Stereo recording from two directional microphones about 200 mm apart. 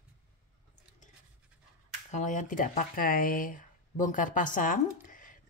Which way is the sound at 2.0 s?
40° left (ahead or behind).